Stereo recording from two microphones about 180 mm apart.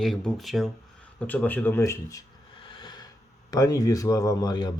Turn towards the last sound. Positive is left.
turn(degrees=20)  # may be behind; listen again after turning